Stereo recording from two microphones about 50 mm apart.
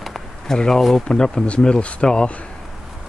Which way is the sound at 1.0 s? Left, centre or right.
Centre.